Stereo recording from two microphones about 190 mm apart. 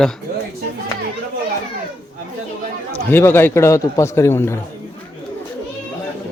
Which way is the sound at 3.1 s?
10° left (ahead or behind).